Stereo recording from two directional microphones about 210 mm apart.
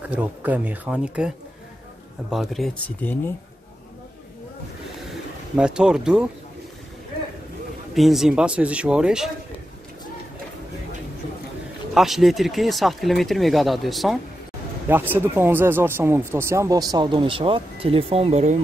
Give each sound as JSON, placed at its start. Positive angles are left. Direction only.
{"t": 0.0, "sound": "speech", "side_deg": -5}
{"t": 2.3, "sound": "speech", "side_deg": 0}
{"t": 5.6, "sound": "speech", "side_deg": -5}
{"t": 7.9, "sound": "speech", "side_deg": 0}
{"t": 11.9, "sound": "speech", "side_deg": 0}